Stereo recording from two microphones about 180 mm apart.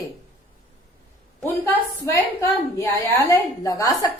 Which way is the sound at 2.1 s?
15° left (ahead or behind).